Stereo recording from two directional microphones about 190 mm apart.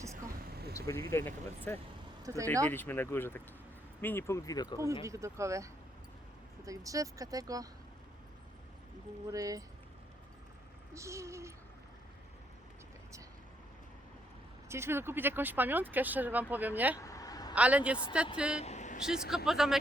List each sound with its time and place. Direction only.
0.2 s vehicle: 50° right (ahead or behind)
0.7 s speech: 15° left (ahead or behind)
2.2 s speech: 15° right (ahead or behind)
2.6 s speech: 10° left (ahead or behind)
5.0 s speech: 15° right (ahead or behind)
9.3 s speech: 20° right (ahead or behind)
10.9 s speech: 15° right (ahead or behind)
14.7 s speech: 15° right (ahead or behind)
17.0 s vehicle: 15° left (ahead or behind)
17.5 s speech: 5° right (ahead or behind)
18.6 s vehicle: 35° left (ahead or behind)
18.9 s speech: 5° right (ahead or behind)